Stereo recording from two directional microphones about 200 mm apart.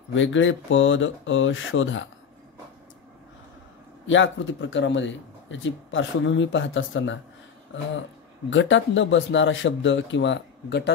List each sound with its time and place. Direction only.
0.1 s speech: 70° left (ahead or behind)
4.1 s speech: 70° left (ahead or behind)
8.5 s speech: 70° left (ahead or behind)